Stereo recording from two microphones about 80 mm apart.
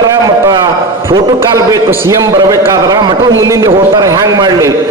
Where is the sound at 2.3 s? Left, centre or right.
Right.